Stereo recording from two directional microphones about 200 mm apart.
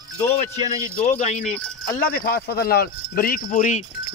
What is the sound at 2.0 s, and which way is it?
Speech, 45° left (ahead or behind).